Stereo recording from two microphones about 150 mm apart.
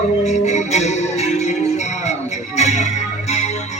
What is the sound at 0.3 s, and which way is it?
Music, 50° left (ahead or behind).